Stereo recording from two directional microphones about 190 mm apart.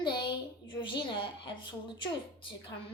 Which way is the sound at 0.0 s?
25° left (ahead or behind).